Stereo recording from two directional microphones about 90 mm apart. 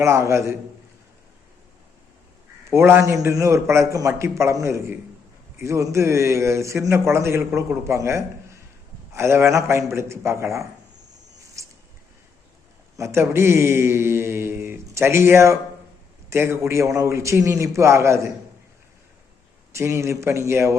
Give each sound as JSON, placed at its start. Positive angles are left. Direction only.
{"t": 0.0, "sound": "a man's voice", "side_deg": -30}
{"t": 2.6, "sound": "a man's voice", "side_deg": -30}
{"t": 13.0, "sound": "a man's voice", "side_deg": -30}
{"t": 19.7, "sound": "a man's voice", "side_deg": -30}